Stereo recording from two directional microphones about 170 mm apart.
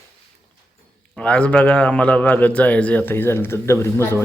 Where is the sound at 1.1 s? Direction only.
5° left (ahead or behind).